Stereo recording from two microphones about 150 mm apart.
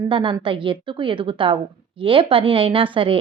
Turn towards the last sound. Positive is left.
turn(degrees=-35)  # may be behind; listen again after turning